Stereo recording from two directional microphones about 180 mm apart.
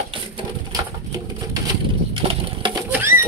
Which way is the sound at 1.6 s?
25° right (ahead or behind).